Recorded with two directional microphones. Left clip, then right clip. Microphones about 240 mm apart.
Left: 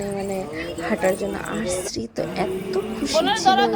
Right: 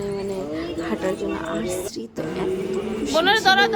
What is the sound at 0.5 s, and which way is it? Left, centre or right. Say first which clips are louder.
Speech: left 1 dB; centre.